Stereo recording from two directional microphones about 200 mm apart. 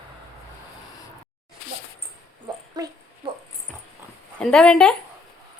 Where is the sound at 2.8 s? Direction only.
20° right (ahead or behind).